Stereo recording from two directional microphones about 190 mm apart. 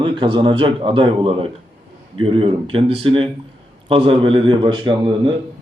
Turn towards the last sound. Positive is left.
turn(degrees=-25)  # may be behind; listen again after turning